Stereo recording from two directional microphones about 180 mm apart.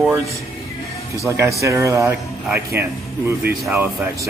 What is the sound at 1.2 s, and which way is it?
Speech, 15° right (ahead or behind).